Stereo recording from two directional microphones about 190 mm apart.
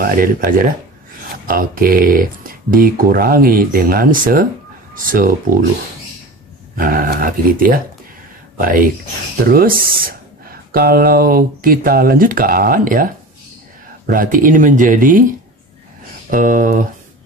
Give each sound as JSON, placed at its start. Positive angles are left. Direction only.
{"t": 0.0, "sound": "speech", "side_deg": -50}
{"t": 6.8, "sound": "speech", "side_deg": -50}
{"t": 16.3, "sound": "speech", "side_deg": -45}